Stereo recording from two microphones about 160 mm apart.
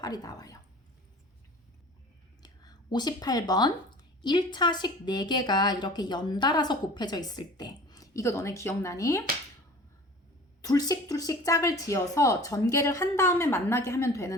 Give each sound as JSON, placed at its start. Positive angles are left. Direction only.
{"t": 0.0, "sound": "speech", "side_deg": 25}
{"t": 2.4, "sound": "a sound", "side_deg": 25}
{"t": 4.2, "sound": "a woman's voice", "side_deg": 30}
{"t": 10.6, "sound": "a woman's voice", "side_deg": 25}